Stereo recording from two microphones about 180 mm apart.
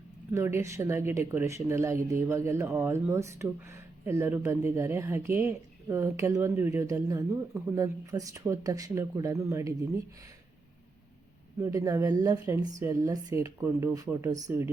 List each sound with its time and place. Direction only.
0.3 s speech: 15° right (ahead or behind)
11.6 s speech: 20° right (ahead or behind)